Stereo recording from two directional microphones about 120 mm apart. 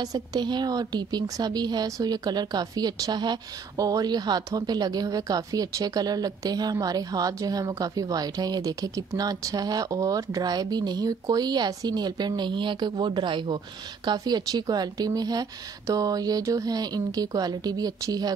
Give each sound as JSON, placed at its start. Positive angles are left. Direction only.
{"t": 0.0, "sound": "a woman's voice", "side_deg": -35}